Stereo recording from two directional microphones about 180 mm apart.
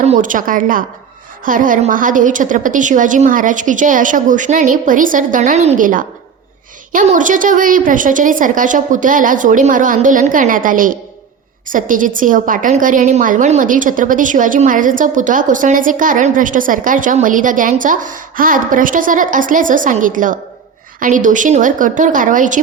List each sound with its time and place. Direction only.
0.0 s a woman's voice: 40° right (ahead or behind)